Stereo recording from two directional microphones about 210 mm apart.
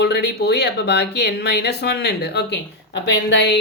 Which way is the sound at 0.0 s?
50° left (ahead or behind).